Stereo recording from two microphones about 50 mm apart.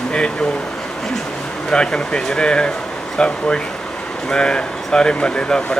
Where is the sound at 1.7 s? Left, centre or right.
Centre.